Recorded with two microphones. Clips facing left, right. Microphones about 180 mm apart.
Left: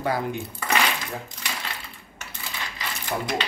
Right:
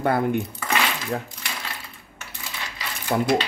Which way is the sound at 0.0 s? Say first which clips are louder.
Right 5 dB; 55° right (ahead or behind).